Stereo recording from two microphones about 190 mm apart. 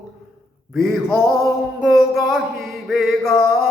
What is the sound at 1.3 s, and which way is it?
Music, 20° right (ahead or behind).